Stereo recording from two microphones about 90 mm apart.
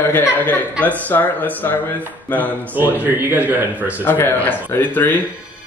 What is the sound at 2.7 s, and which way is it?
Speech, 20° right (ahead or behind).